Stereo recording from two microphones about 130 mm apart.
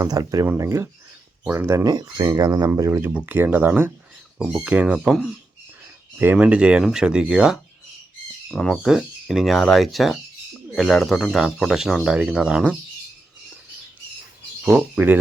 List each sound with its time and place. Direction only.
0.0 s speech: 25° right (ahead or behind); by 12.7 s 5° right (ahead or behind)
14.6 s speech: 10° right (ahead or behind)